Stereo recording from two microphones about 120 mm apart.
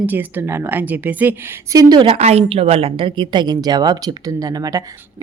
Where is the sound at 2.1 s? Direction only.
60° right (ahead or behind).